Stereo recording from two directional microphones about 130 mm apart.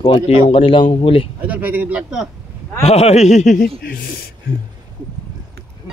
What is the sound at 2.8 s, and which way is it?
Speech, 55° left (ahead or behind).